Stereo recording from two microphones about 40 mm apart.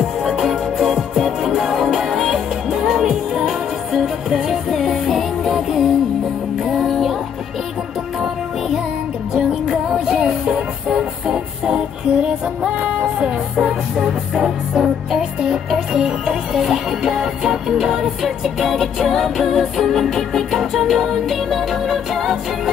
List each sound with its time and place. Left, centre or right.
0.0 s music: centre
9.5 s music: centre; by 13.3 s right
13.6 s music: centre
18.2 s music: centre